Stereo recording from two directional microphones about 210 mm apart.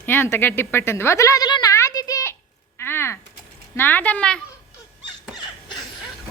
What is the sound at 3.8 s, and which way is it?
Speech, 10° left (ahead or behind).